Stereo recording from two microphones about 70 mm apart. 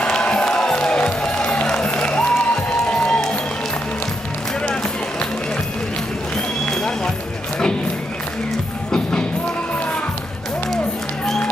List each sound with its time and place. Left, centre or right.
0.0 s music: centre